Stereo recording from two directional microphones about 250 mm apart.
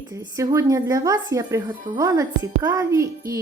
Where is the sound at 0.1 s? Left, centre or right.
Centre.